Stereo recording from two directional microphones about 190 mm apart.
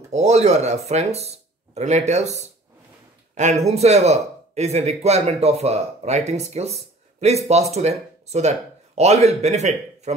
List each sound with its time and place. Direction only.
0.1 s speech: 35° right (ahead or behind)